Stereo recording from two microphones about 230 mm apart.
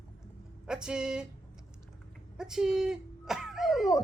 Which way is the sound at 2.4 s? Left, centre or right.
Centre.